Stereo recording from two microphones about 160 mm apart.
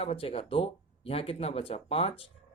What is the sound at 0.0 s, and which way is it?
Speech, 40° left (ahead or behind).